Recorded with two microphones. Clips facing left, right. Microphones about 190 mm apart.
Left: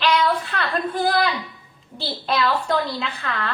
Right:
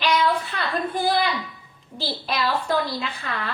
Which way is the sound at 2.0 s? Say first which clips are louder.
Left 3 dB; 5° right (ahead or behind).